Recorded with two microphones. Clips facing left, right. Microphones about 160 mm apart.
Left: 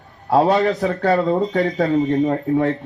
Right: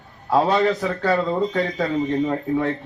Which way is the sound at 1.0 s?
20° left (ahead or behind).